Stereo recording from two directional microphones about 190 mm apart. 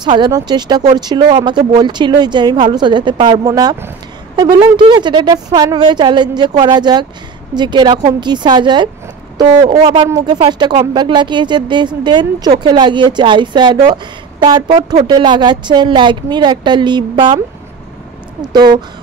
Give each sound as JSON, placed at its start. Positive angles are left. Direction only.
{"t": 0.0, "sound": "speech", "side_deg": -25}
{"t": 18.4, "sound": "speech", "side_deg": -20}